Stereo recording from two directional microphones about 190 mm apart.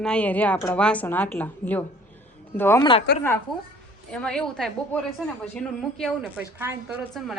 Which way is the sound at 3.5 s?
Centre (ahead or behind).